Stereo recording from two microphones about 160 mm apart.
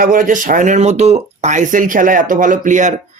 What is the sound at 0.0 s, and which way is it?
Speech, 55° right (ahead or behind).